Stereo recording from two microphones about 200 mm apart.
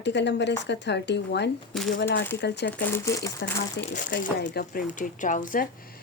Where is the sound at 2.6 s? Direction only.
10° left (ahead or behind).